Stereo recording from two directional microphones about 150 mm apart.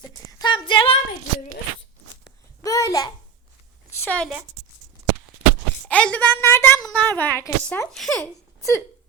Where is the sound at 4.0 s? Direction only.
10° left (ahead or behind).